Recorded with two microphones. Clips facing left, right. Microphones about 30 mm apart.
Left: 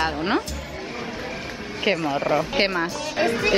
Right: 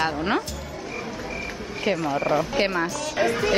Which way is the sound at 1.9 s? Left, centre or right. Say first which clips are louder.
Left 2 dB; left.